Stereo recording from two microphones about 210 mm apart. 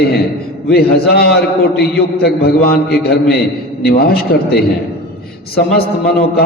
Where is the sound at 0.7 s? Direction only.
50° left (ahead or behind).